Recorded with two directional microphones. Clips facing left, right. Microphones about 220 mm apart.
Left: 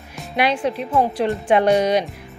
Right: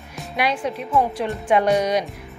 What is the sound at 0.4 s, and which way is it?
Speech, 30° left (ahead or behind).